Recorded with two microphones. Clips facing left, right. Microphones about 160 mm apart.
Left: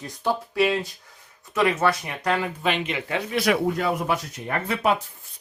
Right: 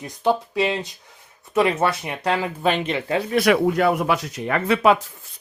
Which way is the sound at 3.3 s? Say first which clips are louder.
Right 5 dB; 70° right (ahead or behind).